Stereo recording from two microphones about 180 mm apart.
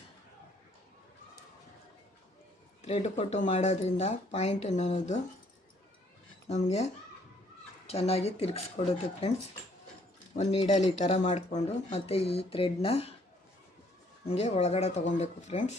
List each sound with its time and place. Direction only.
2.8 s speech: 35° left (ahead or behind)
6.5 s speech: 40° left (ahead or behind)
10.3 s speech: 40° left (ahead or behind)
14.3 s speech: 35° left (ahead or behind)